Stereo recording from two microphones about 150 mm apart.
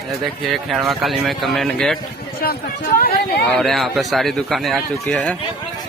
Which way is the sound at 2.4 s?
80° left.